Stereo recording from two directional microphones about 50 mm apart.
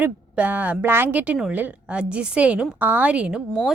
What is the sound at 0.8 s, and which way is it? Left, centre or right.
Speech, right.